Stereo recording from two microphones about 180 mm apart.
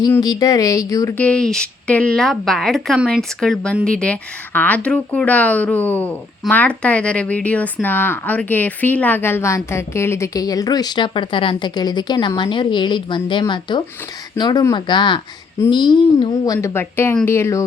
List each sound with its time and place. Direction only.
0.1 s speech: 20° left (ahead or behind)